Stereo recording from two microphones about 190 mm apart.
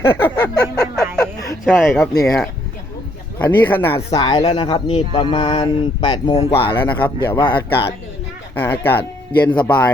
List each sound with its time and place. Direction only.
0.0 s a sound: 10° left (ahead or behind)
1.6 s speech: centre (ahead or behind)
4.2 s speech: 25° left (ahead or behind)
6.8 s speech: 10° left (ahead or behind)
7.3 s speech: 25° left (ahead or behind)
8.5 s speech: 10° left (ahead or behind)